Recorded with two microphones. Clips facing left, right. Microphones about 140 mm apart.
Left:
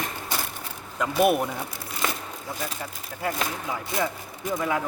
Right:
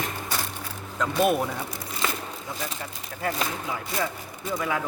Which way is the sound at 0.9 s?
10° left (ahead or behind).